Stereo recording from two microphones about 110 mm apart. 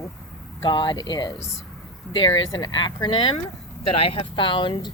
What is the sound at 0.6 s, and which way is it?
Speech, 45° left (ahead or behind).